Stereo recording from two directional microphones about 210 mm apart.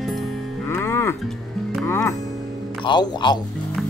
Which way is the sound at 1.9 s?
10° left (ahead or behind).